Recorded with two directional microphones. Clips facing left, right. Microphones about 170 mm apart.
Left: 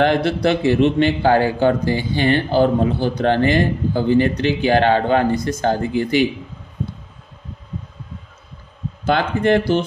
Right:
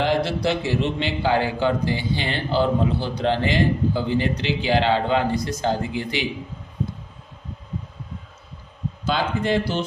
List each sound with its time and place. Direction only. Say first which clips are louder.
0.0 s a man's voice: left 5 dB; 60° left (ahead or behind)
9.0 s speech: left 6 dB; 60° left (ahead or behind)